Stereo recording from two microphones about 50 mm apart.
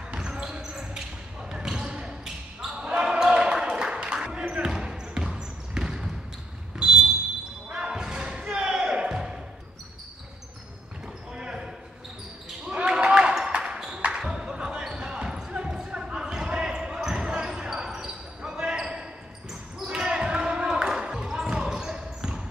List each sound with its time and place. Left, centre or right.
0.1 s basketball bounce: centre
7.7 s basketball bounce: centre
11.3 s basketball bounce: centre
12.6 s ping: centre
14.2 s basketball bounce: centre